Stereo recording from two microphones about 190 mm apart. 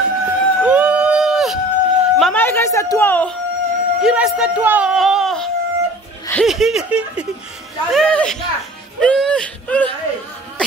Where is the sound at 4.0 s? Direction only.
5° right (ahead or behind).